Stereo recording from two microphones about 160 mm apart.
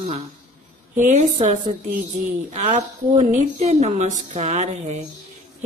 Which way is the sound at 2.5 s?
45° right (ahead or behind).